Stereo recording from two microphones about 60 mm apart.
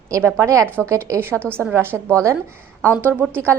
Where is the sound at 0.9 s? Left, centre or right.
Right.